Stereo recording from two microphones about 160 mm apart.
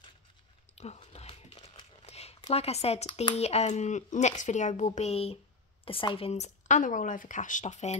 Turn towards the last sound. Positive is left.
turn(degrees=45)  # may be behind; listen again after turning